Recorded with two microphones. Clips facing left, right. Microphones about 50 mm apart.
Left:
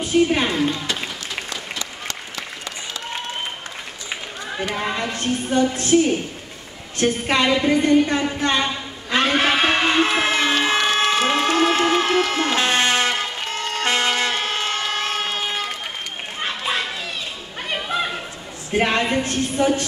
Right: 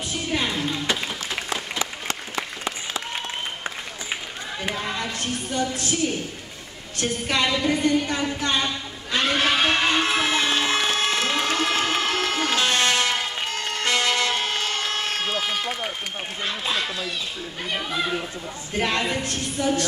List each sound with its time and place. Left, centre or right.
0.0 s speech: left
1.5 s applause: centre
4.7 s a woman's voice: left
8.4 s a sound: left
10.2 s a sound: left
16.3 s a woman's voice: left
18.7 s speech: left